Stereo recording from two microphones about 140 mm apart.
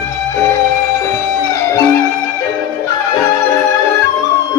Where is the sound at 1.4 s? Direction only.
20° left (ahead or behind).